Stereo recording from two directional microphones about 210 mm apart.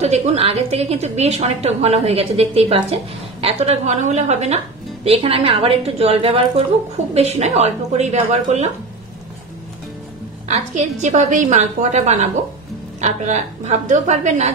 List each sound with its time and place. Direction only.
0.0 s a woman's voice: 30° right (ahead or behind)
10.5 s a woman's voice: 35° right (ahead or behind)